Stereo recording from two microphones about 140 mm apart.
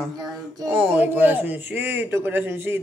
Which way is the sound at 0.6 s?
10° right (ahead or behind).